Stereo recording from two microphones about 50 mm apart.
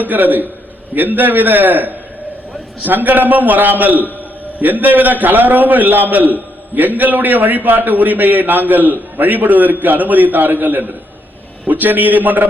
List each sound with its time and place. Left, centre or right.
0.0 s a man's voice: right